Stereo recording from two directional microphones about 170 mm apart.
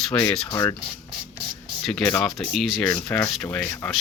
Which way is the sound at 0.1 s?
5° left (ahead or behind).